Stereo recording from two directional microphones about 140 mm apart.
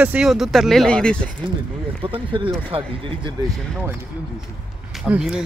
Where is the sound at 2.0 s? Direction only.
35° right (ahead or behind).